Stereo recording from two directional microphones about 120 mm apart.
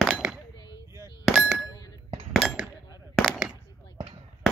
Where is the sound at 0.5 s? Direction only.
35° left (ahead or behind).